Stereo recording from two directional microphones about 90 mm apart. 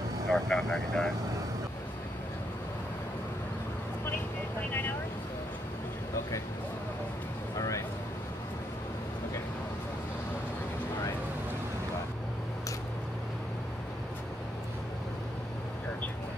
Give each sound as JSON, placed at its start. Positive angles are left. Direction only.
{"t": 0.3, "sound": "speech", "side_deg": 5}
{"t": 7.5, "sound": "vehicle", "side_deg": 40}